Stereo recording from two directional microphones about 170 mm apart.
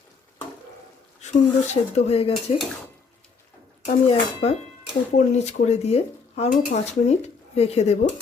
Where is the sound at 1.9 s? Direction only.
35° left (ahead or behind).